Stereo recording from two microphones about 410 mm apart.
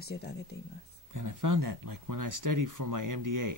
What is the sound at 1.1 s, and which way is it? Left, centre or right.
Speech, right.